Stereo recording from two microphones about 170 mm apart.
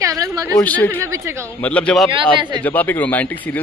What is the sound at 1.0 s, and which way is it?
Speech, 15° right (ahead or behind).